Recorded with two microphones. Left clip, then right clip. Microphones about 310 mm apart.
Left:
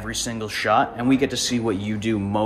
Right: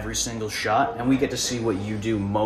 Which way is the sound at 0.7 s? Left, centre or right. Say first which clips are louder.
Left 1 dB; left.